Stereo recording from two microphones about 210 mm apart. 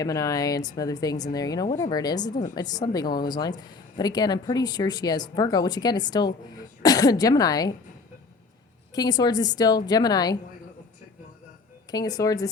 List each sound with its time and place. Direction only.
0.0 s a woman's voice: 15° left (ahead or behind)
8.9 s a woman's voice: 20° left (ahead or behind)
11.9 s speech: 20° left (ahead or behind)